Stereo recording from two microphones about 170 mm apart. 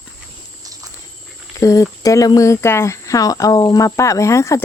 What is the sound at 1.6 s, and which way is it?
Speech, 20° left (ahead or behind).